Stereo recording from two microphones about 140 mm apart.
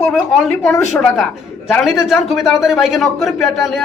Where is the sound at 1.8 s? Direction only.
Centre (ahead or behind).